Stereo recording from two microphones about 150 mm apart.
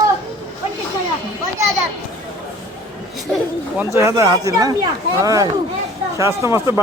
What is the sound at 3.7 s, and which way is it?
Speech, 20° right (ahead or behind).